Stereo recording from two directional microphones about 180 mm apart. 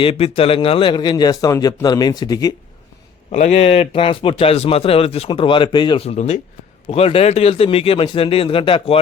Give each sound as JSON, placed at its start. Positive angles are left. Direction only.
{"t": 0.0, "sound": "a man's voice", "side_deg": 30}
{"t": 3.3, "sound": "a man's voice", "side_deg": 40}